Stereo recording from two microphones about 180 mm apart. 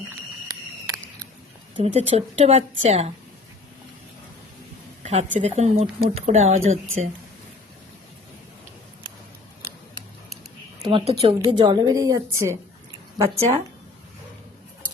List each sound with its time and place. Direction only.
1.7 s speech: 35° right (ahead or behind)
5.0 s speech: 40° right (ahead or behind)
10.8 s a woman's voice: 30° right (ahead or behind)